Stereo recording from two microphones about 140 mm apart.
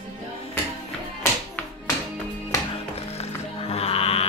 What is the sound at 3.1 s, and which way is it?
Music, 45° left (ahead or behind).